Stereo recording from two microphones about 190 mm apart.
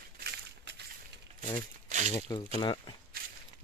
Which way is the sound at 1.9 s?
40° right (ahead or behind).